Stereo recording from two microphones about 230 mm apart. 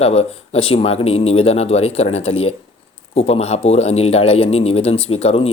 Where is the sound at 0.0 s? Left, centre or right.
Left.